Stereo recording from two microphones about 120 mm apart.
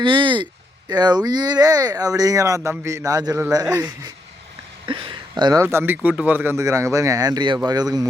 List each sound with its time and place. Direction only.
0.0 s speech: 45° right (ahead or behind)
4.9 s a sound: 45° right (ahead or behind)
5.3 s speech: 30° right (ahead or behind)
5.6 s speech: 15° right (ahead or behind); by 8.0 s 35° right (ahead or behind)